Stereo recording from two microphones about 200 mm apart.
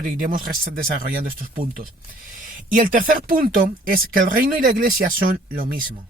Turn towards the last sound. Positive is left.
turn(degrees=-45)  # may be behind; listen again after turning